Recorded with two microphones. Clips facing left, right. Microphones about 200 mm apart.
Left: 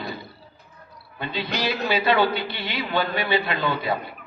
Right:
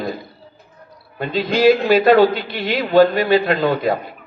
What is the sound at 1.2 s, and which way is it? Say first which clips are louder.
A man's voice: right 12 dB; 45° right (ahead or behind).